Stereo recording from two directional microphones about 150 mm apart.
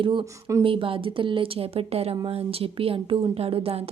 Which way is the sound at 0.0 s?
35° right (ahead or behind).